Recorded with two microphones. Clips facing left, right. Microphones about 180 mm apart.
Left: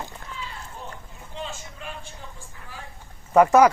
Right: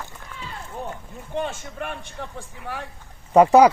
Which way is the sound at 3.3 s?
20° right (ahead or behind).